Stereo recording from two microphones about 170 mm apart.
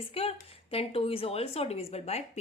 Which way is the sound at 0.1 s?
35° left (ahead or behind).